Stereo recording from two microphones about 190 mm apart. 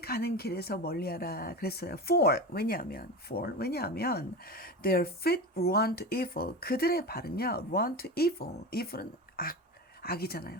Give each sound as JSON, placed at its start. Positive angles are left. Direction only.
{"t": 0.0, "sound": "speech", "side_deg": 55}